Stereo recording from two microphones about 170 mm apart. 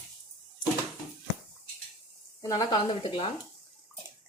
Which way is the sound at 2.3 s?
20° left (ahead or behind).